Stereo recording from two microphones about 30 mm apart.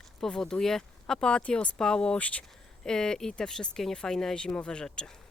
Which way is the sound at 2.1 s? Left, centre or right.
Left.